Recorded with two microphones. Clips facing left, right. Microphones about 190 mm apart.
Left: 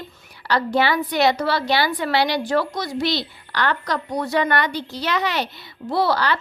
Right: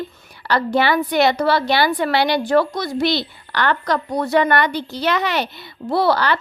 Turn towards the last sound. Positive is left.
turn(degrees=-55)  # may be behind; listen again after turning